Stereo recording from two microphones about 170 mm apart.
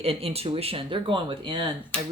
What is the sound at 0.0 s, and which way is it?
Speech, 35° right (ahead or behind).